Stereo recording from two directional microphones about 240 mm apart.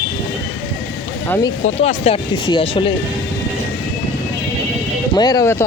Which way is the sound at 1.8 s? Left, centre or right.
Left.